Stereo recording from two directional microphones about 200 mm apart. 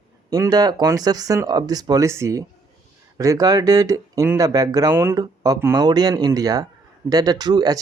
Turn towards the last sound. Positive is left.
turn(degrees=-20)  # may be behind; listen again after turning